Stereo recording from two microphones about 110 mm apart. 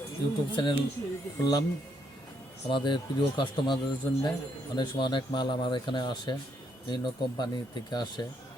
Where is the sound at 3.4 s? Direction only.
45° left (ahead or behind).